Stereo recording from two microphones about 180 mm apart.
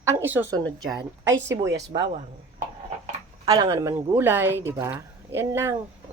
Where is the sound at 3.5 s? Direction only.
20° right (ahead or behind).